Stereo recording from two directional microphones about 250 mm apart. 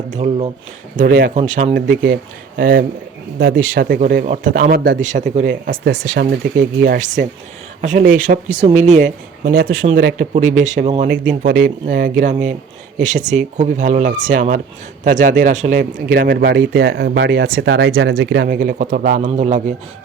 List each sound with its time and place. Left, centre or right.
0.2 s speech: right
0.9 s speech: right
11.1 s speech: right